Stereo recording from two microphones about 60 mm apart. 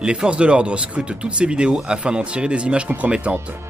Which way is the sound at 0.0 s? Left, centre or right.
Centre.